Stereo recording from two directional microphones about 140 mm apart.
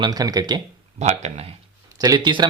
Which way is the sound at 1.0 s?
50° right (ahead or behind).